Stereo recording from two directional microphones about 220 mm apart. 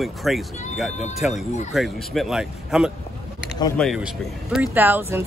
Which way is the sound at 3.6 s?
20° left (ahead or behind).